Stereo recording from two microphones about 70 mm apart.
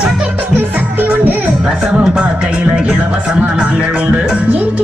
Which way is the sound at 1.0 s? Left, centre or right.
Right.